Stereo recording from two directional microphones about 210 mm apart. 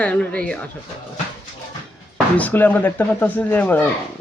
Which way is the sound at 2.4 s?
10° left (ahead or behind).